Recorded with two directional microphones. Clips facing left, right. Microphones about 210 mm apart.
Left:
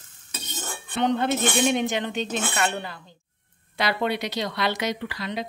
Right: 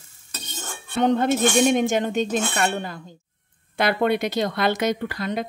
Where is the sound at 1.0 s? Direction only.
45° right (ahead or behind).